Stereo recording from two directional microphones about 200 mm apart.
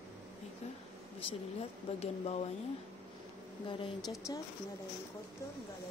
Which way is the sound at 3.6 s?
20° left (ahead or behind).